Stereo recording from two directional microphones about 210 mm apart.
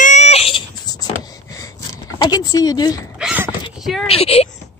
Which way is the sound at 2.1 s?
20° left (ahead or behind).